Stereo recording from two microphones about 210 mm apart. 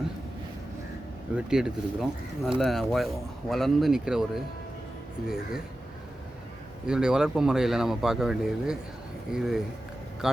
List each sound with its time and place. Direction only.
1.4 s speech: 5° right (ahead or behind)
6.8 s a man's voice: 5° right (ahead or behind)